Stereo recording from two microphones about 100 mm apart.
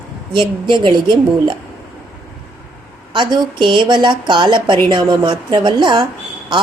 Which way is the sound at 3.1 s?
50° right (ahead or behind).